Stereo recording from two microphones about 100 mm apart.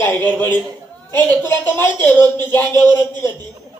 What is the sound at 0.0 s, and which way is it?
A man's voice, 20° left (ahead or behind).